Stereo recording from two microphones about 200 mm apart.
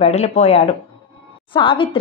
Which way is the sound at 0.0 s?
35° left (ahead or behind).